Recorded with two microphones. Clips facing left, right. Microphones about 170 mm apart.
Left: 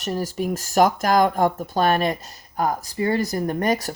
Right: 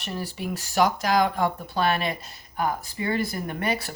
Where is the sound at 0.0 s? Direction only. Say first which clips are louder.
Left 7 dB; 40° left (ahead or behind).